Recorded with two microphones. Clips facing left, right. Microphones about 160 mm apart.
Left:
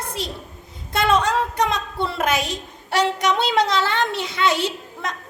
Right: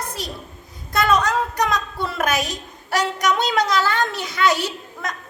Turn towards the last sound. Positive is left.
turn(degrees=25)  # may be behind; listen again after turning